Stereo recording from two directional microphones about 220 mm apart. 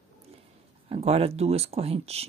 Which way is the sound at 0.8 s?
25° right (ahead or behind).